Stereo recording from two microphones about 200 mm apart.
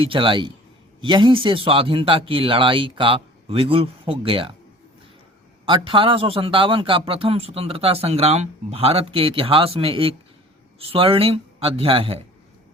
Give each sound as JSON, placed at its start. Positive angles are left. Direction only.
{"t": 0.0, "sound": "a man's voice", "side_deg": -25}
{"t": 5.6, "sound": "a man's voice", "side_deg": -25}